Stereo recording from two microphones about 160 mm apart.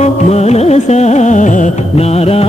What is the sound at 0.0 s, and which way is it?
Music, 45° left (ahead or behind).